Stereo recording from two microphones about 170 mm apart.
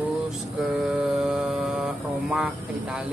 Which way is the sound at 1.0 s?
5° right (ahead or behind).